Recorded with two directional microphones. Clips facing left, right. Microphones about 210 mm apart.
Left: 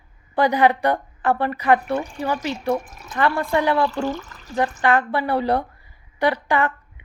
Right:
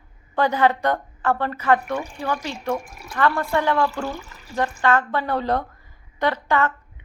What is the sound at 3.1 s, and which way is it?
Speech, 15° left (ahead or behind).